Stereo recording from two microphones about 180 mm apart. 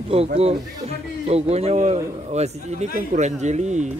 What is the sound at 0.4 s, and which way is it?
A man's voice, 35° right (ahead or behind).